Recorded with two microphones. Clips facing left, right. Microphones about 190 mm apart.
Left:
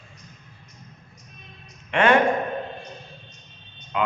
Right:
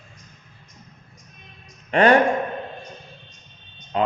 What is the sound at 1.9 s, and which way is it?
Speech, 35° right (ahead or behind).